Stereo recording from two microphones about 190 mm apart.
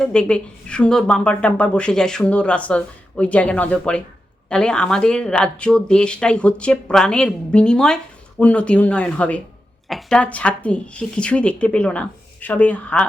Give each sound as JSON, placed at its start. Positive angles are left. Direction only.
{"t": 0.0, "sound": "speech", "side_deg": 5}